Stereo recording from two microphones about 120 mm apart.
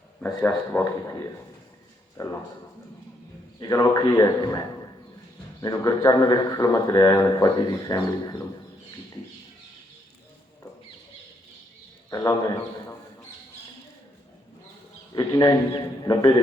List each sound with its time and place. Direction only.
0.2 s speech: 15° left (ahead or behind)
2.2 s a man's voice: 30° left (ahead or behind)
3.6 s a man's voice: 30° left (ahead or behind)
5.6 s a man's voice: 30° left (ahead or behind)
12.1 s a man's voice: 25° left (ahead or behind)
15.1 s a man's voice: 30° left (ahead or behind)